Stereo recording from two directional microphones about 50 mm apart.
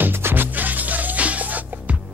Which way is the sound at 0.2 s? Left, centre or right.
Right.